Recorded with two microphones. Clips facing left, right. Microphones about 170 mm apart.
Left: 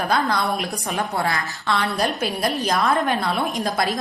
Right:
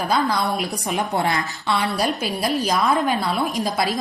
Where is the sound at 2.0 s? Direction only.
Centre (ahead or behind).